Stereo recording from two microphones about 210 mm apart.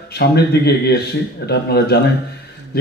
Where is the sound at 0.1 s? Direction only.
50° left (ahead or behind).